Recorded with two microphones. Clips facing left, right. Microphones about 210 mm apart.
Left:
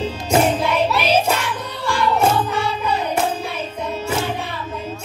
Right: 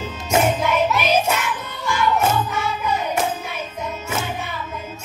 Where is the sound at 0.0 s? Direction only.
30° left (ahead or behind).